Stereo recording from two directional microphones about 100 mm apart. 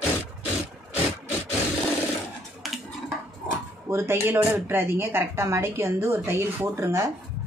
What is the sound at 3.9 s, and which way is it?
A woman's voice, 25° right (ahead or behind).